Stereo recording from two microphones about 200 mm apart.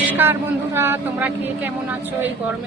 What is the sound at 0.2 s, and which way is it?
Speech, 10° right (ahead or behind).